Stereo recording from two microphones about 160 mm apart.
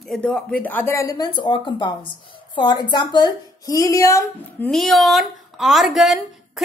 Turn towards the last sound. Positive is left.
turn(degrees=0)  # may be behind; listen again after turning